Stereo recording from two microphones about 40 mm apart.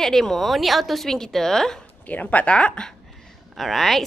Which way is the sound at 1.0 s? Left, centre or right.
Centre.